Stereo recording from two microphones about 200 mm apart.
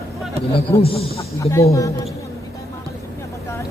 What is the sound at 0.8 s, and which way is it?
Speech, 30° left (ahead or behind).